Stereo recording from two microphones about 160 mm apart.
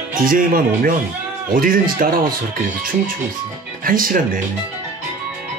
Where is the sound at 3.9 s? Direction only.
60° right (ahead or behind).